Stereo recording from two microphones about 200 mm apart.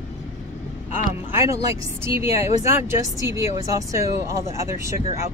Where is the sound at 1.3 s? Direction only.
15° right (ahead or behind).